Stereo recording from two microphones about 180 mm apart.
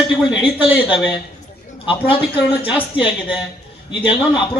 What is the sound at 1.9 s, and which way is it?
Speech, 30° left (ahead or behind).